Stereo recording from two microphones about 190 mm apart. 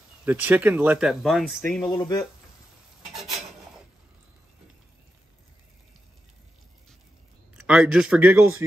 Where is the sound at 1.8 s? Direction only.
20° left (ahead or behind).